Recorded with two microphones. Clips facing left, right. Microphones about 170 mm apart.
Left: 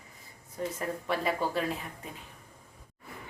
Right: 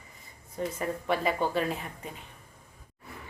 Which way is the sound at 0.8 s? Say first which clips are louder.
Right 3 dB; centre (ahead or behind).